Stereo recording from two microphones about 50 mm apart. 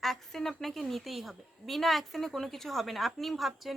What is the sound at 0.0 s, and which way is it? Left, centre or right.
Speech, centre.